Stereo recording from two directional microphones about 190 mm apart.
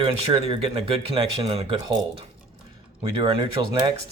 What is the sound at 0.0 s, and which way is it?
Speech, 30° right (ahead or behind).